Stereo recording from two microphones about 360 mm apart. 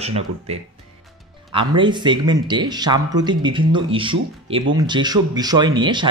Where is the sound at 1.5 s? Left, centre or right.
Centre.